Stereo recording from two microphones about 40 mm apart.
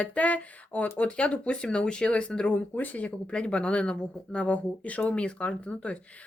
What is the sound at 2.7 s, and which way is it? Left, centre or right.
Speech, left.